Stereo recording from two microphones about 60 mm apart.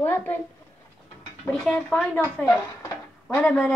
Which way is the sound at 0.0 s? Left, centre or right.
Left.